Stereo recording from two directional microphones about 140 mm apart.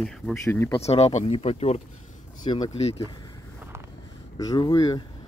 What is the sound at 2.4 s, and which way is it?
Speech, 30° left (ahead or behind).